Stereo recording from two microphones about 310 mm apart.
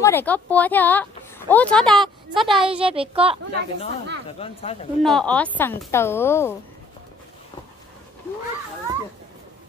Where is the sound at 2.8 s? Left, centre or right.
Centre.